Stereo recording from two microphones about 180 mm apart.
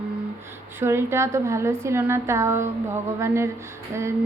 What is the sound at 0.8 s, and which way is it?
A woman's voice, 15° right (ahead or behind).